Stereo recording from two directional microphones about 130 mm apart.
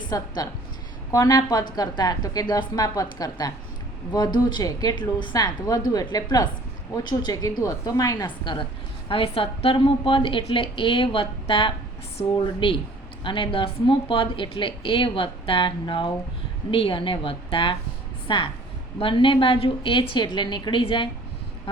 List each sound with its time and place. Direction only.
0.1 s a woman's voice: 25° left (ahead or behind)
9.0 s a woman's voice: 45° left (ahead or behind)